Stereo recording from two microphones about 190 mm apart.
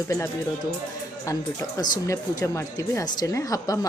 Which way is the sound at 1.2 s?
15° left (ahead or behind).